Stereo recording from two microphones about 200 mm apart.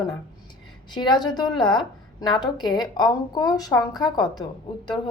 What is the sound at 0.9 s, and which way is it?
A woman's voice, 20° left (ahead or behind).